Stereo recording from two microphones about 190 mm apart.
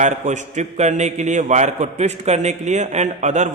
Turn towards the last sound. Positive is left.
turn(degrees=-40)  # may be behind; listen again after turning